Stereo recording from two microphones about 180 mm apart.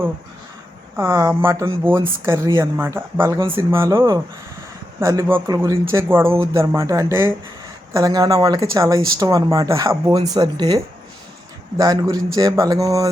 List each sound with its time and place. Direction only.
0.9 s speech: 15° right (ahead or behind)
11.8 s speech: 20° right (ahead or behind)